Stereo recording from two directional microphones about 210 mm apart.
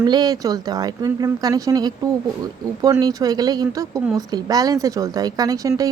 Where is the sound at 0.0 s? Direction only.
20° right (ahead or behind).